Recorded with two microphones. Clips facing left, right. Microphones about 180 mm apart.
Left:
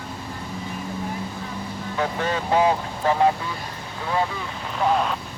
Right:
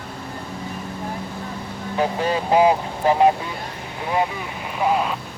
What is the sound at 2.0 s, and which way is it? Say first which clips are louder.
Speech: right 4 dB; 15° right (ahead or behind).